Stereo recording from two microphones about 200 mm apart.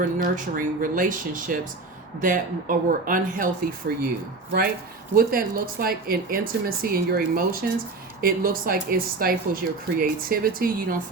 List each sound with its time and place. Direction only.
0.0 s speech: 40° right (ahead or behind)
5.1 s speech: 45° right (ahead or behind)